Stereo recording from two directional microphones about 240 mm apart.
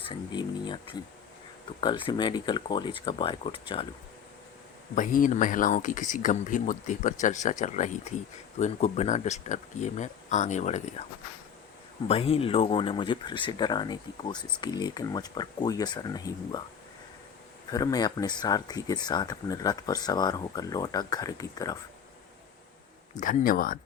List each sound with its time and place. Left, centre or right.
0.1 s speech: centre
4.9 s speech: left
12.0 s speech: left
17.7 s speech: centre
23.2 s speech: left